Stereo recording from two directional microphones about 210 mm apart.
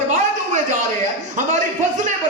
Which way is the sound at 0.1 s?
35° right (ahead or behind).